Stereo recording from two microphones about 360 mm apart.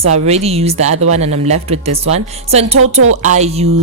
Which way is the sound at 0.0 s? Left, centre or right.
Centre.